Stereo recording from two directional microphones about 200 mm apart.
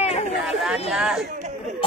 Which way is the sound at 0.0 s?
35° left (ahead or behind).